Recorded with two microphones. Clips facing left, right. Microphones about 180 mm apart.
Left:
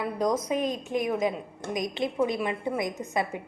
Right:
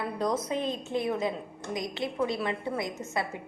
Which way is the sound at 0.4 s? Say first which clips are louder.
Left 3 dB; 15° left (ahead or behind).